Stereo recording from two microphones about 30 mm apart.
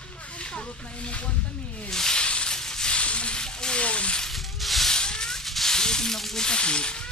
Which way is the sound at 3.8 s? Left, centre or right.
Left.